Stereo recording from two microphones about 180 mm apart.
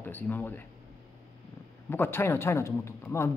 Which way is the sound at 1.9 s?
10° left (ahead or behind).